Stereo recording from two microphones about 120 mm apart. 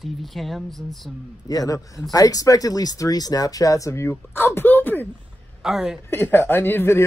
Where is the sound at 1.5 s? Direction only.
30° left (ahead or behind).